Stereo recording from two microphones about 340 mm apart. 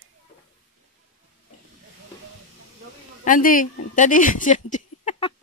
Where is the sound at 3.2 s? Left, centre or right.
Left.